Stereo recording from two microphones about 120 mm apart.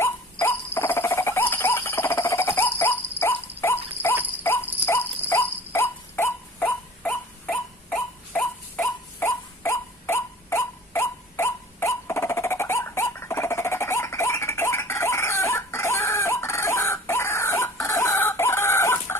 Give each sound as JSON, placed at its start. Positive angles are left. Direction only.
{"t": 0.0, "sound": "dog", "side_deg": 20}